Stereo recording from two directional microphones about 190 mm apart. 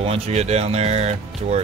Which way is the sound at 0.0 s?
35° right (ahead or behind).